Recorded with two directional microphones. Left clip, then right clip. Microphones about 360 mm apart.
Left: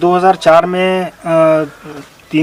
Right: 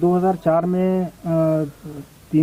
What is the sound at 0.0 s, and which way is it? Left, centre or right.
Speech, centre.